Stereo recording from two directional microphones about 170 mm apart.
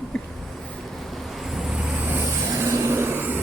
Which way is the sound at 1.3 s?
Centre (ahead or behind).